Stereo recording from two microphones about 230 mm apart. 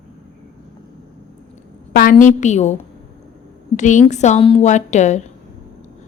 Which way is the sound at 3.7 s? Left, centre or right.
Left.